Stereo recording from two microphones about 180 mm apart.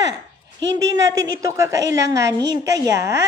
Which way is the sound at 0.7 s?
20° right (ahead or behind).